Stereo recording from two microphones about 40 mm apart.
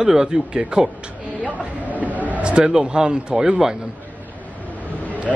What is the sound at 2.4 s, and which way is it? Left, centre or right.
Speech, right.